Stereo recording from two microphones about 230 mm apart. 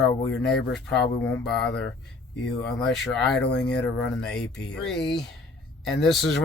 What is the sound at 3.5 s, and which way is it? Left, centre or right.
Speech, left.